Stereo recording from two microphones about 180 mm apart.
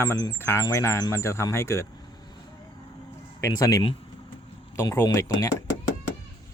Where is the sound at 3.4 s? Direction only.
20° left (ahead or behind).